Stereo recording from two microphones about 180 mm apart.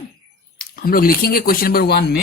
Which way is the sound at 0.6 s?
55° left (ahead or behind).